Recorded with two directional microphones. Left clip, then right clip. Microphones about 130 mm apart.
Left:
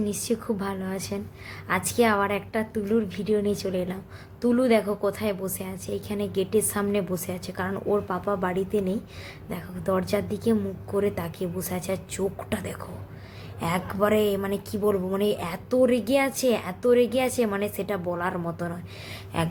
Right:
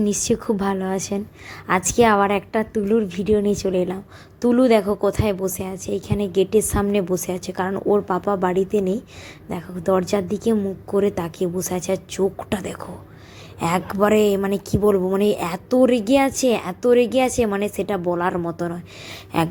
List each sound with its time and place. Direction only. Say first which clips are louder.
0.0 s a woman's voice: right 7 dB; 60° right (ahead or behind); by 18.8 s 40° right (ahead or behind)
19.3 s a woman's voice: right 7 dB; 55° right (ahead or behind)